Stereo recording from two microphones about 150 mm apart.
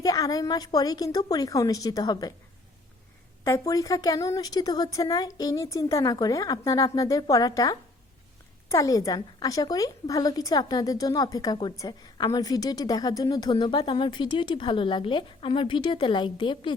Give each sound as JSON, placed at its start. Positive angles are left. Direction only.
{"t": 0.0, "sound": "a woman's voice", "side_deg": 25}
{"t": 3.4, "sound": "a woman's voice", "side_deg": 20}